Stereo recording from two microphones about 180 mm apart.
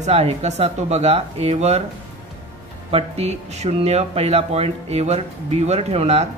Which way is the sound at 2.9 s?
35° right (ahead or behind).